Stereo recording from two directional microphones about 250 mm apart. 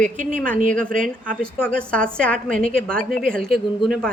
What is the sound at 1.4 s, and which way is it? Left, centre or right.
A woman's voice, centre.